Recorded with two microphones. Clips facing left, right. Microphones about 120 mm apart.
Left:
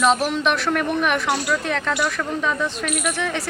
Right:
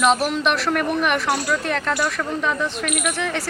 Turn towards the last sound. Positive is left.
turn(degrees=0)  # may be behind; listen again after turning